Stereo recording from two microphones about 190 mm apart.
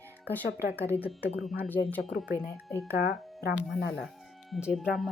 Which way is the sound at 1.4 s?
Centre (ahead or behind).